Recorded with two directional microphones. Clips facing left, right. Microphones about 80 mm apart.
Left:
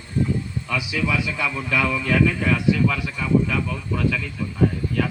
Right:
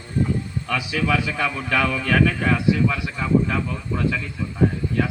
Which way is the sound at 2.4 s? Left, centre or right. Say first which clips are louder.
Even; right.